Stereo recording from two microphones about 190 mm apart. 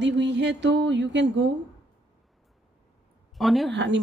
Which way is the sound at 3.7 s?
65° right (ahead or behind).